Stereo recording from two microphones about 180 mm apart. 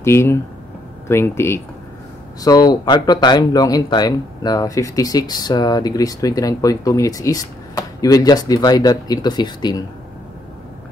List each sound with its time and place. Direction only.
0.0 s speech: 15° left (ahead or behind)